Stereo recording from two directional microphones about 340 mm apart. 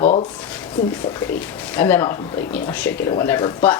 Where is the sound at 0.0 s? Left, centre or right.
Centre.